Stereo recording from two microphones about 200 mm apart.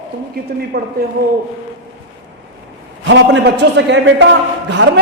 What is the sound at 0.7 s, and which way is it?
Speech, 55° right (ahead or behind).